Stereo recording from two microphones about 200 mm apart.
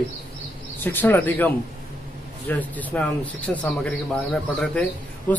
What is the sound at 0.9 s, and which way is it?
Speech, 10° left (ahead or behind).